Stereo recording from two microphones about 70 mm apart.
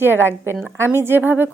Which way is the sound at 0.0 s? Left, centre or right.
Right.